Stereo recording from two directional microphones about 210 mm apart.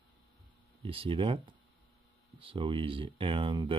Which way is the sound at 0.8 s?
25° right (ahead or behind).